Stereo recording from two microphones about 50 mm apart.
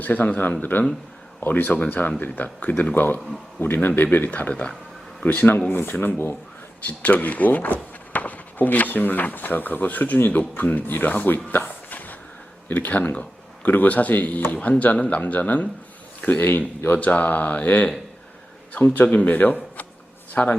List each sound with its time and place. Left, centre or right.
0.0 s speech: left
6.8 s speech: left
11.5 s a sound: left
12.6 s speech: left
16.4 s speech: left